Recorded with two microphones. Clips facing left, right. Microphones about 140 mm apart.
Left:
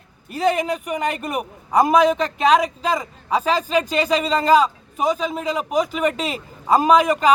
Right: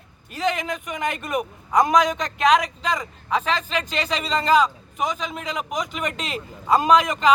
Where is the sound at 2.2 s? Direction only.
35° left (ahead or behind).